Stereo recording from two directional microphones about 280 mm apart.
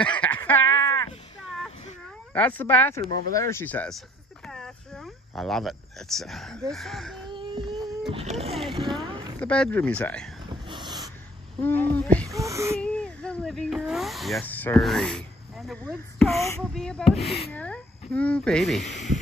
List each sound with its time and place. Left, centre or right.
0.1 s a sound: centre
2.3 s speech: centre
3.1 s speech: right
3.3 s speech: centre
4.5 s cricket: centre
6.7 s speech: centre
7.2 s baby cry: centre
8.1 s speech: right
8.7 s boat: centre
9.4 s speech: centre
10.5 s a sound: centre
11.6 s speech: centre
12.3 s wheeze: centre
12.7 s speech: centre